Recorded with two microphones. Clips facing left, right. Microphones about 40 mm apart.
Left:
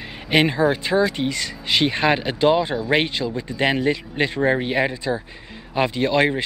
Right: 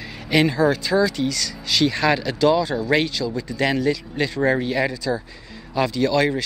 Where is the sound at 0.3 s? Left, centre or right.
Left.